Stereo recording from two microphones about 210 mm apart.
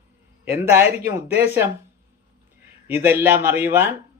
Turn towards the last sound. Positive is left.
turn(degrees=-10)  # may be behind; listen again after turning